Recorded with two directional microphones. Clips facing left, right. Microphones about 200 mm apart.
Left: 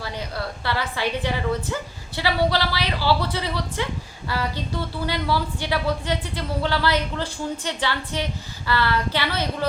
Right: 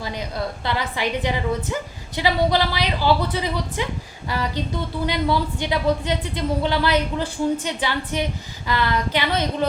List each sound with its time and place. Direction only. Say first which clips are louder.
0.0 s speech: right 3 dB; 15° right (ahead or behind)